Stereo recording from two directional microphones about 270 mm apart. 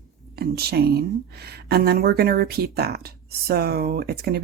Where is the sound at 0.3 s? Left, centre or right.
Right.